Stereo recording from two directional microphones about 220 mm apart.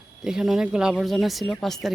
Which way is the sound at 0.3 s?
Centre (ahead or behind).